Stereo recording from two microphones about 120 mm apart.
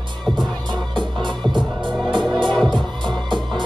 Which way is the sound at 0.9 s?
40° right (ahead or behind).